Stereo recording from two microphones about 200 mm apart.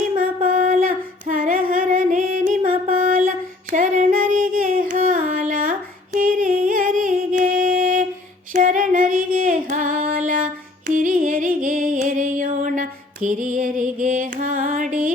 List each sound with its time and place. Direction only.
0.4 s female singing: 45° right (ahead or behind)
6.1 s music: 45° right (ahead or behind)
8.5 s female singing: 40° right (ahead or behind)